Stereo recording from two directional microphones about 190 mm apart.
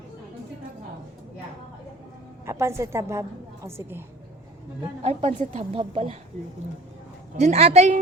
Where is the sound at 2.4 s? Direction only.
15° right (ahead or behind).